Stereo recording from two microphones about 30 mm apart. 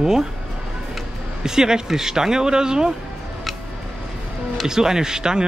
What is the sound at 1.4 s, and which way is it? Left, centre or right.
Speech, right.